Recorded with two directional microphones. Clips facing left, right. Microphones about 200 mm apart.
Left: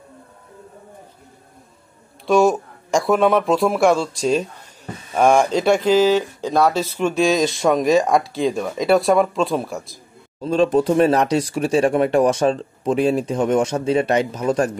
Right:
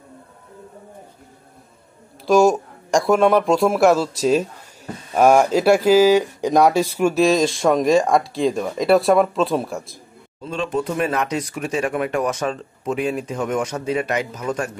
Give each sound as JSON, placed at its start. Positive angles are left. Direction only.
{"t": 2.2, "sound": "speech", "side_deg": 0}
{"t": 10.4, "sound": "speech", "side_deg": 40}